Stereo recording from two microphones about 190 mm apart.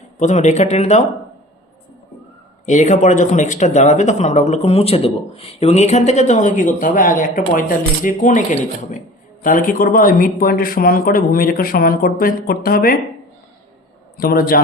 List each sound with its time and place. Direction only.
0.2 s speech: 40° left (ahead or behind)
2.6 s speech: 40° left (ahead or behind)
14.2 s speech: 50° left (ahead or behind)